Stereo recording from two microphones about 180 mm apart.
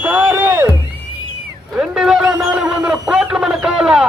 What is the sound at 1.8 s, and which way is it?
Speech, 5° right (ahead or behind).